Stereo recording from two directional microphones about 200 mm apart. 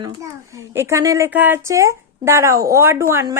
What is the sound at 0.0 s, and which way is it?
A child's voice, 15° right (ahead or behind).